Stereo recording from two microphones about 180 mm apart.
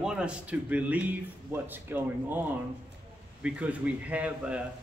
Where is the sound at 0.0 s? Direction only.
5° right (ahead or behind).